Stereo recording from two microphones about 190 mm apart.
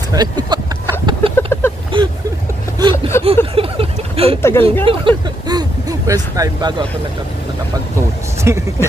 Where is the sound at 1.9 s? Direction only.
25° right (ahead or behind).